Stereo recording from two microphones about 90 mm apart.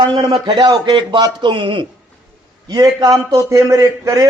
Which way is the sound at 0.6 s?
55° right (ahead or behind).